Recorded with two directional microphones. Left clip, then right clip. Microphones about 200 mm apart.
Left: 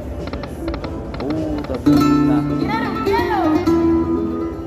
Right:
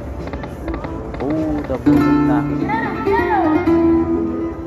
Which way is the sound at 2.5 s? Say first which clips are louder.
Right 1 dB; 20° left (ahead or behind).